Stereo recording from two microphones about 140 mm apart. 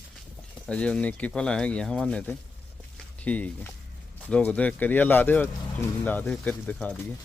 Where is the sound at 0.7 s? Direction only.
10° left (ahead or behind).